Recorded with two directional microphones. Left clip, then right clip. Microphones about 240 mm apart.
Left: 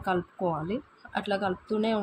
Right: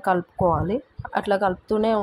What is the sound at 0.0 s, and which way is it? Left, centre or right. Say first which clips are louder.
Speech: right 8 dB; centre.